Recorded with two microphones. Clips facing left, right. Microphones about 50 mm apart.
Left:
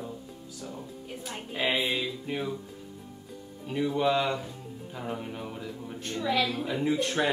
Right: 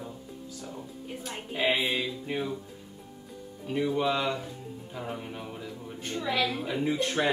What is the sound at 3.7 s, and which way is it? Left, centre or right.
A woman's voice, centre.